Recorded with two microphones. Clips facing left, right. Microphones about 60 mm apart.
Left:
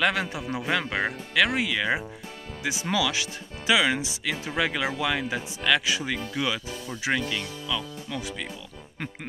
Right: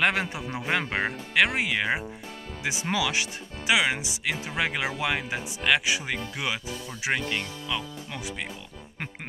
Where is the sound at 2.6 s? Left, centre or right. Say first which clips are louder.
Left 1 dB; right.